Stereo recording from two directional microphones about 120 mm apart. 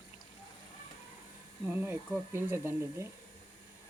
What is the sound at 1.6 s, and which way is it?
Speech, 20° right (ahead or behind).